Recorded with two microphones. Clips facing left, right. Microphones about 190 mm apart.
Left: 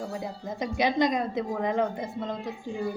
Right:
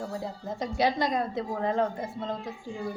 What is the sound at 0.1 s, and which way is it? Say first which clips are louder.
Speech: even; 15° left (ahead or behind).